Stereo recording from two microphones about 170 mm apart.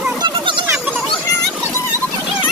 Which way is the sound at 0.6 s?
15° right (ahead or behind).